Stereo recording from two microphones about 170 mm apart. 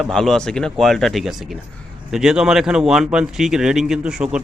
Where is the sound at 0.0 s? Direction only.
Centre (ahead or behind).